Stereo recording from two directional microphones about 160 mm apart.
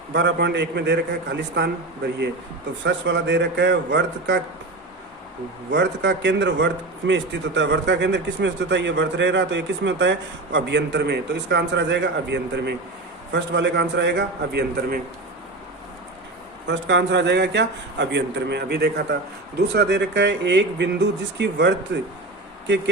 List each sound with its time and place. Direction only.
0.1 s a man's voice: 90° right
2.8 s a man's voice: 90° right
5.7 s a man's voice: 90° right
16.6 s a man's voice: 90° right